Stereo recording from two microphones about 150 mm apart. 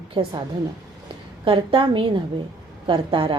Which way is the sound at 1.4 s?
35° right (ahead or behind).